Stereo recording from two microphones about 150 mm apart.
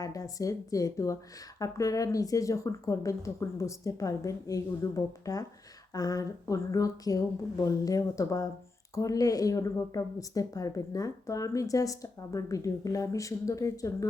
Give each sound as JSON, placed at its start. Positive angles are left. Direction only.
{"t": 0.0, "sound": "a woman's voice", "side_deg": 25}